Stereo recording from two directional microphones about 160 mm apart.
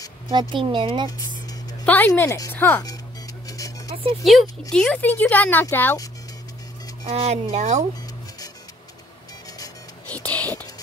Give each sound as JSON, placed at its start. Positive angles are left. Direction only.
{"t": 0.3, "sound": "speech", "side_deg": -30}
{"t": 1.0, "sound": "a sound", "side_deg": 20}
{"t": 1.9, "sound": "speech", "side_deg": 10}
{"t": 3.4, "sound": "music", "side_deg": 20}
{"t": 4.2, "sound": "speech", "side_deg": 0}
{"t": 7.1, "sound": "speech", "side_deg": -40}
{"t": 10.1, "sound": "whispering", "side_deg": 10}